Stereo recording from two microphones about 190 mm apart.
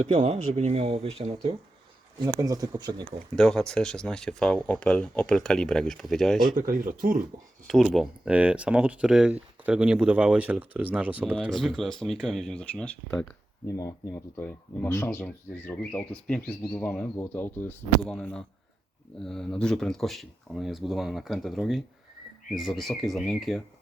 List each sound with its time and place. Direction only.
0.0 s speech: 35° right (ahead or behind)
2.3 s speech: 20° right (ahead or behind)
3.3 s speech: 5° left (ahead or behind)
6.7 s speech: 45° right (ahead or behind)
7.7 s speech: centre (ahead or behind)
11.3 s speech: centre (ahead or behind)
13.7 s speech: 15° left (ahead or behind); by 23.6 s centre (ahead or behind)